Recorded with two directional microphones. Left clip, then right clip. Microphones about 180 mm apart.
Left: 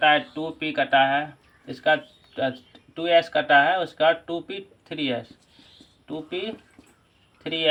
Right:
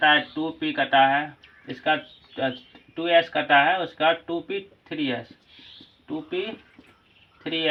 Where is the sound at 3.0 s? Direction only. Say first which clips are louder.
Left 1 dB; 30° left (ahead or behind).